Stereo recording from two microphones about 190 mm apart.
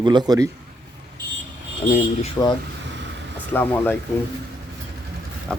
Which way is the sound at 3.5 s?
10° left (ahead or behind).